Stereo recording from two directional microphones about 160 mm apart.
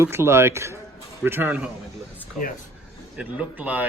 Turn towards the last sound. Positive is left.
turn(degrees=-10)  # may be behind; listen again after turning